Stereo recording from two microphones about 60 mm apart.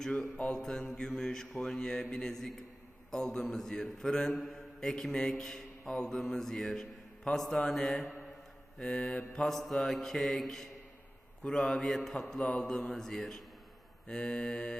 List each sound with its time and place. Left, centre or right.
0.3 s mantra: left
0.6 s mantra: centre
12.4 s mantra: centre